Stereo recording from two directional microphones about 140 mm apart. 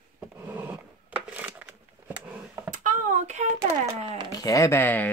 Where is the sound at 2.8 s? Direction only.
65° right (ahead or behind).